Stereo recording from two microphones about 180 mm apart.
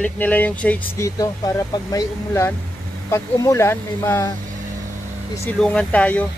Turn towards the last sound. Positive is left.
turn(degrees=5)  # may be behind; listen again after turning